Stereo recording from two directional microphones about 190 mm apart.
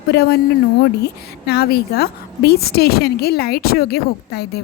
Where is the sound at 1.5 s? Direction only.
55° left (ahead or behind).